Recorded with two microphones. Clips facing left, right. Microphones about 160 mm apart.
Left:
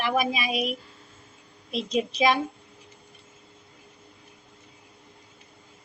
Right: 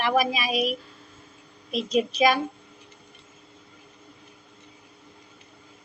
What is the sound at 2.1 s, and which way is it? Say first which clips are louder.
Speech: right 1 dB; 25° left (ahead or behind).